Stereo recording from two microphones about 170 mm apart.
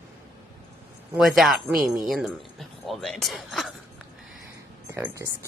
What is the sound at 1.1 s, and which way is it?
Speech, centre (ahead or behind).